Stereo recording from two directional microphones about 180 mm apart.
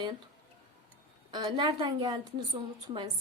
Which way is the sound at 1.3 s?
25° right (ahead or behind).